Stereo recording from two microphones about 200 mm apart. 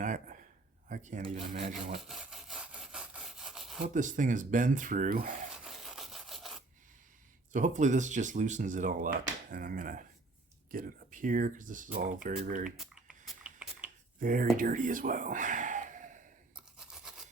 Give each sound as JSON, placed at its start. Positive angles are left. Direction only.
{"t": 0.0, "sound": "a sound", "side_deg": -40}
{"t": 0.9, "sound": "speech", "side_deg": -40}
{"t": 2.0, "sound": "sawing", "side_deg": 0}
{"t": 3.8, "sound": "speech", "side_deg": -40}
{"t": 5.6, "sound": "rub", "side_deg": 0}
{"t": 7.5, "sound": "speech", "side_deg": -40}
{"t": 12.7, "sound": "typing", "side_deg": -5}
{"t": 14.2, "sound": "speech", "side_deg": -45}
{"t": 16.6, "sound": "toothbrush", "side_deg": -5}